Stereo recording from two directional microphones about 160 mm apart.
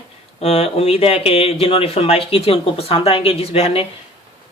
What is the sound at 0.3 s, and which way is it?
Speech, 40° left (ahead or behind).